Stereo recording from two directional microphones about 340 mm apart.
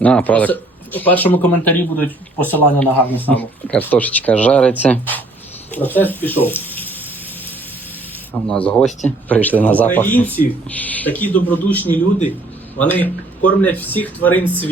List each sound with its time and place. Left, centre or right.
0.0 s speech: centre
8.3 s speech: centre